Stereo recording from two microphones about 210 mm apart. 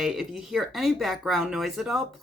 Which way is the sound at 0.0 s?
Centre (ahead or behind).